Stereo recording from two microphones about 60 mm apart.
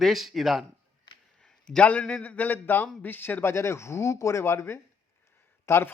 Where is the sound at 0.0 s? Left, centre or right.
Centre.